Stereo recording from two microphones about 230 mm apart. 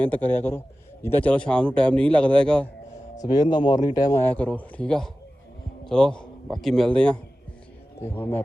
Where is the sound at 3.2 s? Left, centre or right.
Centre.